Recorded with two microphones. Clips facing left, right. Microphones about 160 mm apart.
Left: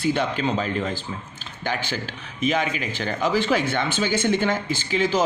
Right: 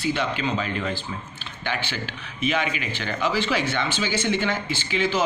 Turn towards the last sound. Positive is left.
turn(degrees=40)  # may be behind; listen again after turning